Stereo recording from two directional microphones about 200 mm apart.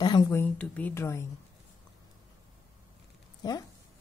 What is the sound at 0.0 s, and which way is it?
Speech, 15° left (ahead or behind).